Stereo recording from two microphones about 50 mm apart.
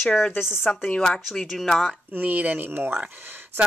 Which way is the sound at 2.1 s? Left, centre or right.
Right.